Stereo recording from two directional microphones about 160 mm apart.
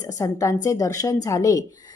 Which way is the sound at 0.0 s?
20° left (ahead or behind).